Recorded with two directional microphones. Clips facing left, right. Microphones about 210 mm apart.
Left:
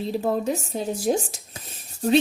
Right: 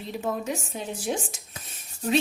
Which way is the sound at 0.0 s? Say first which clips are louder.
Left 6 dB; 35° left (ahead or behind).